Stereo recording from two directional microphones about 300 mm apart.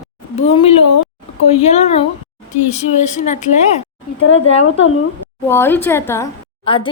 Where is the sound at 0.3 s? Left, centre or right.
Centre.